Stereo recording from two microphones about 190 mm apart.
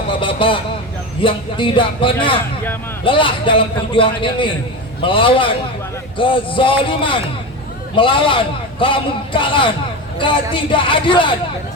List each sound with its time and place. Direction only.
0.1 s vehicle: 25° left (ahead or behind)
1.2 s a man's voice: 25° left (ahead or behind)